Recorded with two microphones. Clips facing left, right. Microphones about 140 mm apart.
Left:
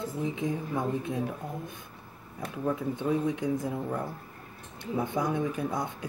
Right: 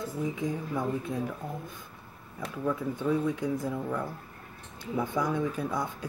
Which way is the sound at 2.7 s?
20° left (ahead or behind).